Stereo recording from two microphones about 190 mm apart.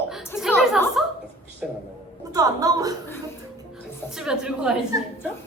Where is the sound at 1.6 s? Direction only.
5° right (ahead or behind).